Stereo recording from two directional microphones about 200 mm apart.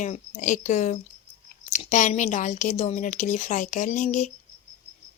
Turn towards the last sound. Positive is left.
turn(degrees=40)  # may be behind; listen again after turning